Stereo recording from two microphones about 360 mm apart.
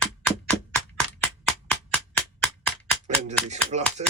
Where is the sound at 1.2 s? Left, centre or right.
Centre.